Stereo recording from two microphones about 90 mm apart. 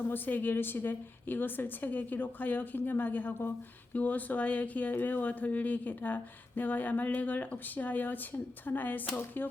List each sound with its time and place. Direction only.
0.1 s a woman's voice: 20° left (ahead or behind)